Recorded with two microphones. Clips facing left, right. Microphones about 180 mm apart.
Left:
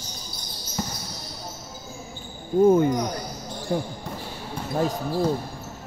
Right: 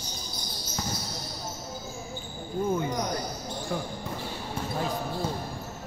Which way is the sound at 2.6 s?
50° left (ahead or behind).